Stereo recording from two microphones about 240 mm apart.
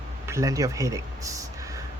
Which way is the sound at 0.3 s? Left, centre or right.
Centre.